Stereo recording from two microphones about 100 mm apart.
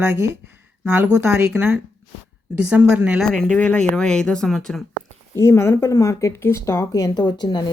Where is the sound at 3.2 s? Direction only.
5° left (ahead or behind).